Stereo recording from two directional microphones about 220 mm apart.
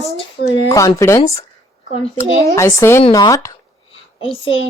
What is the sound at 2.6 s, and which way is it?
A woman's voice, 15° left (ahead or behind).